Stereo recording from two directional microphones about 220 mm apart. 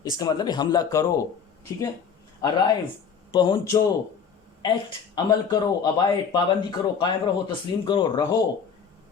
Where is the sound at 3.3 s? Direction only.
20° left (ahead or behind).